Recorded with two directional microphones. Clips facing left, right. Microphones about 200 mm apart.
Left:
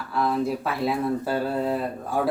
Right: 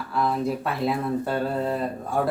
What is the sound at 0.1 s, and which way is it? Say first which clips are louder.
Speech: left 1 dB; centre (ahead or behind).